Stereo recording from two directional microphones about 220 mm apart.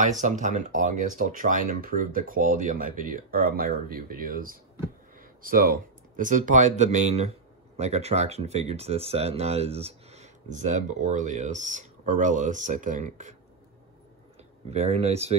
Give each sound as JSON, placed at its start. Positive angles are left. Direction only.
{"t": 0.0, "sound": "speech", "side_deg": -35}
{"t": 14.7, "sound": "speech", "side_deg": -30}